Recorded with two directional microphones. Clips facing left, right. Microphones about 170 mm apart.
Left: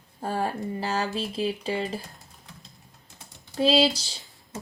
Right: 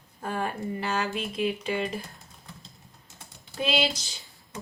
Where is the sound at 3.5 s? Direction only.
35° left (ahead or behind).